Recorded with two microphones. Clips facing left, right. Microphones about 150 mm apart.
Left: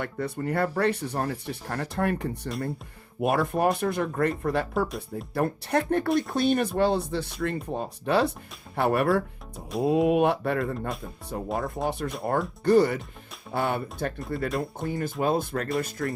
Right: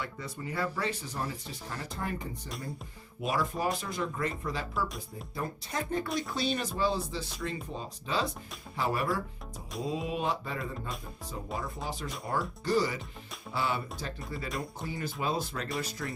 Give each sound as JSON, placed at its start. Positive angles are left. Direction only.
{"t": 0.0, "sound": "speech", "side_deg": 60}
{"t": 6.1, "sound": "speech", "side_deg": 55}
{"t": 11.5, "sound": "speech", "side_deg": 50}
{"t": 11.9, "sound": "speech", "side_deg": 60}